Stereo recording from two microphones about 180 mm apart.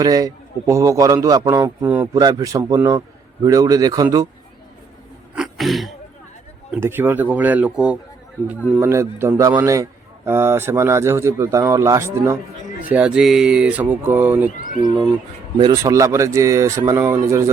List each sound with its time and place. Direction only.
0.0 s a man's voice: 20° right (ahead or behind)
5.3 s throat clearing: centre (ahead or behind)
6.7 s a man's voice: 10° right (ahead or behind)
12.9 s a man's voice: 5° right (ahead or behind)
14.6 s a sound: 45° left (ahead or behind)
15.5 s a man's voice: 20° right (ahead or behind)